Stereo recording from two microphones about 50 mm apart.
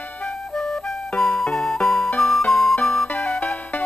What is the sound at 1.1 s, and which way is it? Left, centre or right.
Music, centre.